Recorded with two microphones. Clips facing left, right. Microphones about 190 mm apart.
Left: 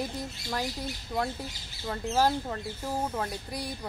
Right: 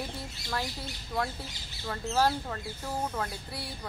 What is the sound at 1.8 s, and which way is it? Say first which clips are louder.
Speech: left 1 dB; 20° left (ahead or behind).